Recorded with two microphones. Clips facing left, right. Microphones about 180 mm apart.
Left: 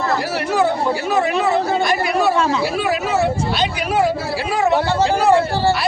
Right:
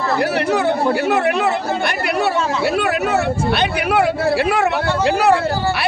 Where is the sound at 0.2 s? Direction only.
60° right (ahead or behind).